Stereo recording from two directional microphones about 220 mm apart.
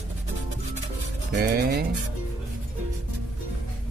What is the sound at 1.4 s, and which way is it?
Speech, 50° right (ahead or behind).